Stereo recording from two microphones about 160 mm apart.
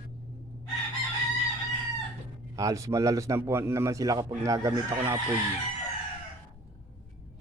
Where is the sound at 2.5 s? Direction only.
20° right (ahead or behind).